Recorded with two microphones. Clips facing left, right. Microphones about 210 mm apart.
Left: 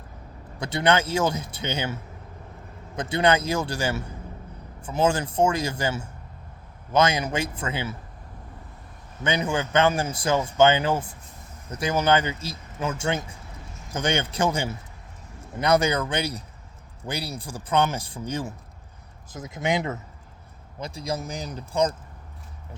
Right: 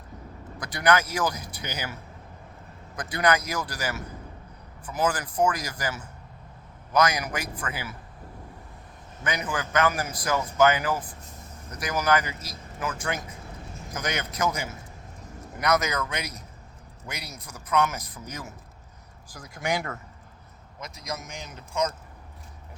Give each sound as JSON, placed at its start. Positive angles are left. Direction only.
{"t": 0.6, "sound": "speech", "side_deg": 25}
{"t": 9.2, "sound": "speech", "side_deg": 25}
{"t": 20.7, "sound": "speech", "side_deg": 30}